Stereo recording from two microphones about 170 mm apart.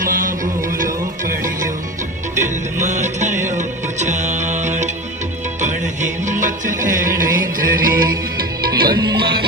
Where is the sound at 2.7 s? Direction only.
45° right (ahead or behind); by 8.7 s 60° right (ahead or behind).